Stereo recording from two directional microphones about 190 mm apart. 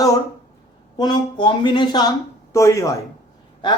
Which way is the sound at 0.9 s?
20° left (ahead or behind).